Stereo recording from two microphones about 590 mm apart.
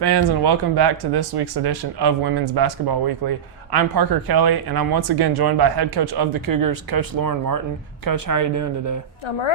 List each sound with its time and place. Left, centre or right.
0.0 s speech: right